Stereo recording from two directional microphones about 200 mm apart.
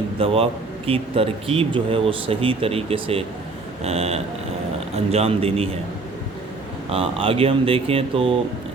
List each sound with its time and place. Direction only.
0.2 s a man's voice: 30° right (ahead or behind)
6.9 s a man's voice: 30° right (ahead or behind)